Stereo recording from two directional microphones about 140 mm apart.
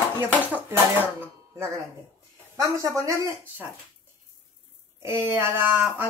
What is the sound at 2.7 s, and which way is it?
Speech, 20° right (ahead or behind).